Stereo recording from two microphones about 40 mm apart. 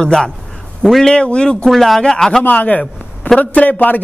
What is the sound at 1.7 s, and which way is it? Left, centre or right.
Speech, centre.